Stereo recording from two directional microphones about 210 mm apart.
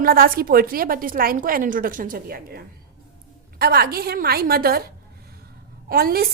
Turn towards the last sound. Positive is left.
turn(degrees=-45)  # may be behind; listen again after turning